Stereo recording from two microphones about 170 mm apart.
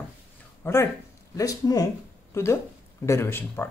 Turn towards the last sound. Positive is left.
turn(degrees=15)  # may be behind; listen again after turning